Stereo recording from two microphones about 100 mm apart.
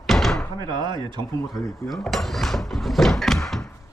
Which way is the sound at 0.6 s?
50° right (ahead or behind).